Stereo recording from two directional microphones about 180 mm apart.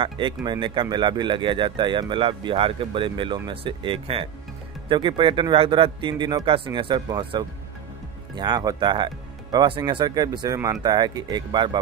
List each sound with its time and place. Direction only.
0.0 s speech: 25° right (ahead or behind)